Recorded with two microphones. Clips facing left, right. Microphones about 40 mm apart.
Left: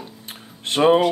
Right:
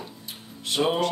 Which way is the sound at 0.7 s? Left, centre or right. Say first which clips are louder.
Left 8 dB; left.